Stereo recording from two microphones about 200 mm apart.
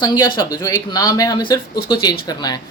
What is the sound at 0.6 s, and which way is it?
A woman's voice, 15° left (ahead or behind).